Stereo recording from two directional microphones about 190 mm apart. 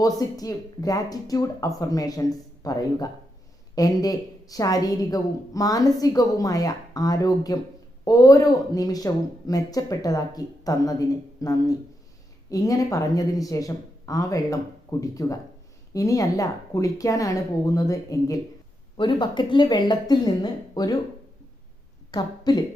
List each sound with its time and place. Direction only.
0.0 s a woman's voice: 20° left (ahead or behind)
22.1 s a woman's voice: 20° left (ahead or behind)